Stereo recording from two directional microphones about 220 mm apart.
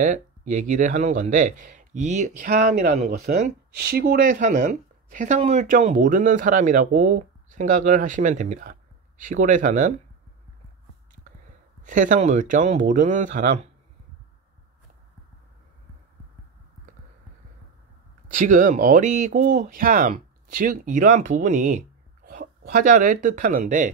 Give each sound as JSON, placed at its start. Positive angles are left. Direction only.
{"t": 0.0, "sound": "speech", "side_deg": -35}
{"t": 11.8, "sound": "speech", "side_deg": -35}
{"t": 18.3, "sound": "speech", "side_deg": -35}